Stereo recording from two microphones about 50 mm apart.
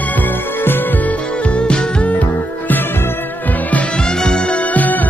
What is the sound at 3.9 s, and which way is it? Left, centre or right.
Music, centre.